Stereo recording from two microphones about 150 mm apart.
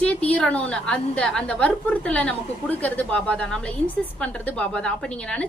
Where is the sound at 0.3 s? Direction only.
10° left (ahead or behind).